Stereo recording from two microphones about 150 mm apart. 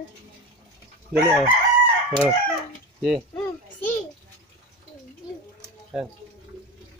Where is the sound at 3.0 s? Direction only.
Centre (ahead or behind).